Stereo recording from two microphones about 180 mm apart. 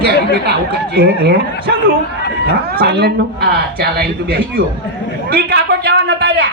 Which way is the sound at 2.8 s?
60° right (ahead or behind).